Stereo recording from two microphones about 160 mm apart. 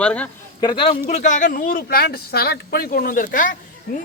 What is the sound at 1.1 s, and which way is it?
Speech, 50° left (ahead or behind).